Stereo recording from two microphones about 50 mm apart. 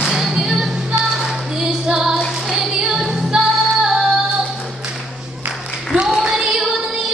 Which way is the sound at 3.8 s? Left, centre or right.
Centre.